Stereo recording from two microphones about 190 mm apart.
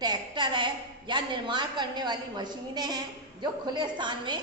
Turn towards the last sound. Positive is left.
turn(degrees=-25)  # may be behind; listen again after turning